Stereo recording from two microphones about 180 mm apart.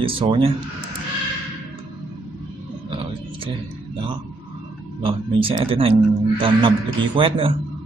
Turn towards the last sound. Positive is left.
turn(degrees=-30)  # may be behind; listen again after turning